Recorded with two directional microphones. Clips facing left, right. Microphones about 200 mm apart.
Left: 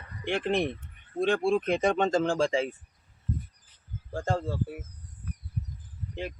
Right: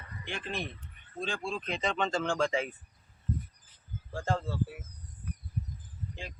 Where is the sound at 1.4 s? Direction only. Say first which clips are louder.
Left 7 dB; 55° left (ahead or behind); by 2.7 s 30° left (ahead or behind).